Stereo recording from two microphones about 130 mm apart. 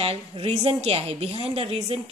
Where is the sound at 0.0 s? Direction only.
50° right (ahead or behind).